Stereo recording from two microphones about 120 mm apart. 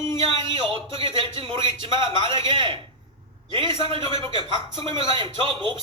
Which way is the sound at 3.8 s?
50° right (ahead or behind).